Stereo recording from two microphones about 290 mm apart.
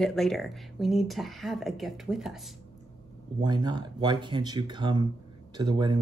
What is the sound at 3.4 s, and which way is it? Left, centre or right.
Speech, centre.